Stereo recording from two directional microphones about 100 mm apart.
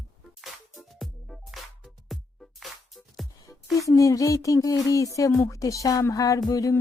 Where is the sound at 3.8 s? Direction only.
35° left (ahead or behind).